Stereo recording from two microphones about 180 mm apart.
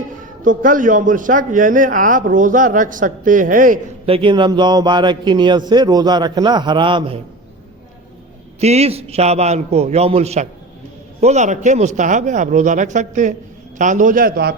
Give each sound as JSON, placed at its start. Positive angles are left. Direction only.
{"t": 0.4, "sound": "a man's voice", "side_deg": -50}
{"t": 4.0, "sound": "a man's voice", "side_deg": -30}
{"t": 8.6, "sound": "a man's voice", "side_deg": -35}